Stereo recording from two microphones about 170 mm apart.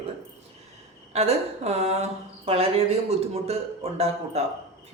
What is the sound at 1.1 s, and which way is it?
A woman's voice, 40° right (ahead or behind).